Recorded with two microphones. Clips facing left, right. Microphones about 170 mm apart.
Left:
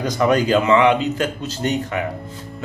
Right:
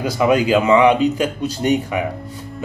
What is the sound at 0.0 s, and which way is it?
Speech, 10° right (ahead or behind).